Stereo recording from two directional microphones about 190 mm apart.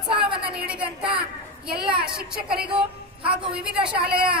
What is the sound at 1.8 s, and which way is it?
Speech, 25° right (ahead or behind).